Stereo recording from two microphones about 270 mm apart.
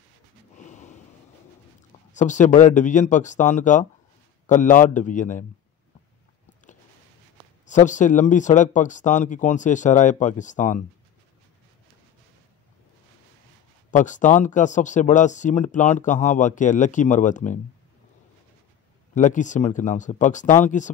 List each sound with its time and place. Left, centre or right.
0.7 s gasp: left
2.1 s speech: left
7.6 s speech: left
13.8 s speech: left
19.1 s speech: left